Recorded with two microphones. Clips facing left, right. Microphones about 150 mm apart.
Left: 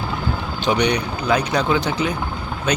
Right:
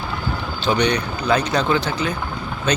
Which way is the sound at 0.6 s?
15° left (ahead or behind).